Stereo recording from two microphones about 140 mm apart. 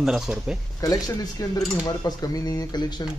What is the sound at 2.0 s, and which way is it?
Speech, 25° left (ahead or behind).